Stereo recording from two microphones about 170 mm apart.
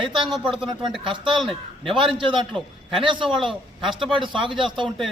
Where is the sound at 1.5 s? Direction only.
30° right (ahead or behind).